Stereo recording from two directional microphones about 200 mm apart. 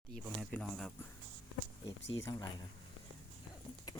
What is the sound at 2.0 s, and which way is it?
Speech, 65° left (ahead or behind).